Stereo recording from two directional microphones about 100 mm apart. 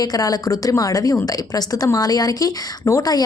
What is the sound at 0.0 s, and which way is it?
A woman's voice, 40° left (ahead or behind).